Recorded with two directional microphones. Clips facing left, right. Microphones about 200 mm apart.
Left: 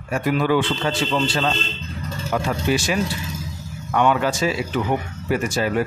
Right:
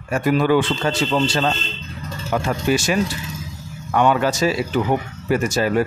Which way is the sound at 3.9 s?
40° right (ahead or behind).